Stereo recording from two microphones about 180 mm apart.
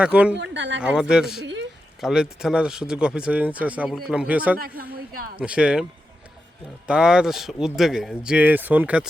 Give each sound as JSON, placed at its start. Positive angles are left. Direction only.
{"t": 0.0, "sound": "speech", "side_deg": -5}
{"t": 0.3, "sound": "speech", "side_deg": -90}
{"t": 0.8, "sound": "speech", "side_deg": -5}
{"t": 4.8, "sound": "a sound", "side_deg": -55}
{"t": 5.4, "sound": "speech", "side_deg": -5}
{"t": 6.8, "sound": "speech", "side_deg": -5}